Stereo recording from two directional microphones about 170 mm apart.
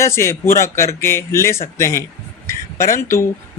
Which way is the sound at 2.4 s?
15° left (ahead or behind).